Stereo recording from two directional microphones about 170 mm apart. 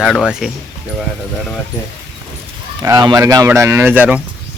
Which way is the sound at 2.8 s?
20° right (ahead or behind).